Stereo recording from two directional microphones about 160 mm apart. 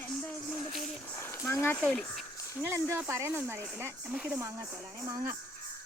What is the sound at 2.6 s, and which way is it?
Speech, 15° right (ahead or behind).